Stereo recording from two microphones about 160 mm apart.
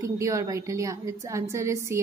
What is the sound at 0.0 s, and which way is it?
A woman's voice, 20° right (ahead or behind).